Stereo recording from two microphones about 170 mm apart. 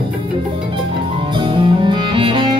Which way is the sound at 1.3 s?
30° right (ahead or behind).